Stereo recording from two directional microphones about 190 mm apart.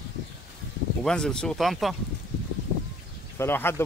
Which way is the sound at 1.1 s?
5° left (ahead or behind).